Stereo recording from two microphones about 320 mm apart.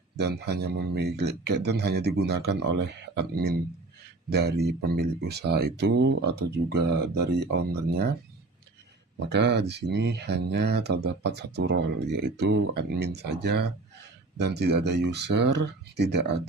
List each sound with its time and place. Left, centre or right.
0.2 s speech: right
9.1 s speech: right